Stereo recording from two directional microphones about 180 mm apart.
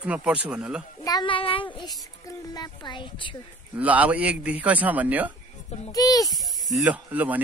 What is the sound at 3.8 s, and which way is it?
Speech, 10° right (ahead or behind).